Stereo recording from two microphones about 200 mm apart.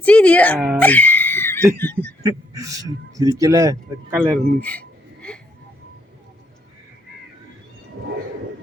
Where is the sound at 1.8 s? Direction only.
10° left (ahead or behind).